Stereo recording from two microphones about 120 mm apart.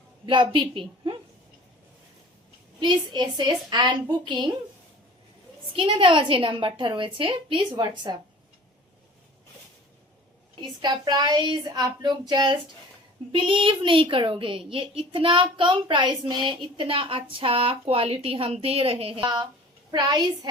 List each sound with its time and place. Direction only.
0.3 s speech: 40° right (ahead or behind)
2.8 s speech: 40° right (ahead or behind)
5.7 s speech: 45° right (ahead or behind)
10.6 s speech: 40° right (ahead or behind)
19.9 s speech: 35° right (ahead or behind)